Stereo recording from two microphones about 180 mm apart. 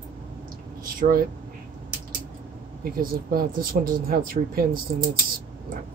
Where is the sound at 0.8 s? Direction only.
50° right (ahead or behind).